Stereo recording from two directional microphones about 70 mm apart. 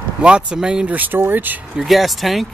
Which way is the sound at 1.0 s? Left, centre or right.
Right.